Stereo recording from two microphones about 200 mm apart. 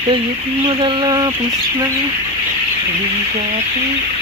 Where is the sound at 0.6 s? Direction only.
25° right (ahead or behind).